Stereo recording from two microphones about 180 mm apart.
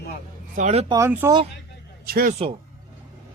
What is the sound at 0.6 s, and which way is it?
Speech, 40° right (ahead or behind).